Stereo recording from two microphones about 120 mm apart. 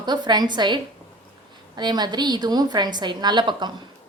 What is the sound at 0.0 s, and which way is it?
A woman's voice, 35° right (ahead or behind).